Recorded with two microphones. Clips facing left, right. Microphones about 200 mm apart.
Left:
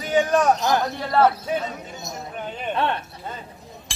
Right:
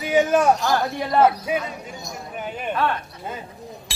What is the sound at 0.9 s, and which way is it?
Speech, 10° right (ahead or behind).